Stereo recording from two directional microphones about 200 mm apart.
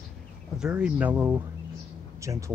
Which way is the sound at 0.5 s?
5° right (ahead or behind).